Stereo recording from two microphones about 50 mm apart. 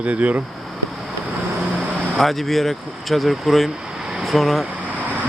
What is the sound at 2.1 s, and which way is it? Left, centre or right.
Speech, centre.